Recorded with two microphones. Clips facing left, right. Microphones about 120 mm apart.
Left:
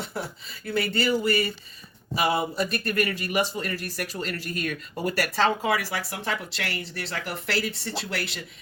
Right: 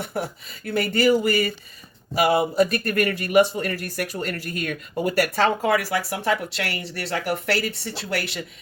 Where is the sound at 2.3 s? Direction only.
55° right (ahead or behind).